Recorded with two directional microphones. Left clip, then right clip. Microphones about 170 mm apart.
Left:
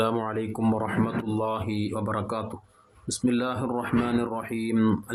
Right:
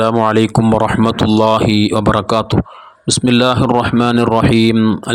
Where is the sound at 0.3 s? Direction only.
65° right (ahead or behind).